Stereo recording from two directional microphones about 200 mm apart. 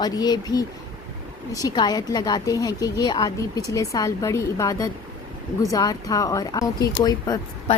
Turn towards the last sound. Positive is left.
turn(degrees=20)  # may be behind; listen again after turning